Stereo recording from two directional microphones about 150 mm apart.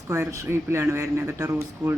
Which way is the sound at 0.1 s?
20° right (ahead or behind).